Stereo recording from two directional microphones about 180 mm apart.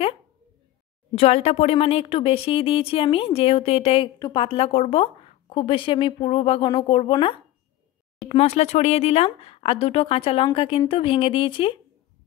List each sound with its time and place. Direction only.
1.1 s a woman's voice: 35° left (ahead or behind)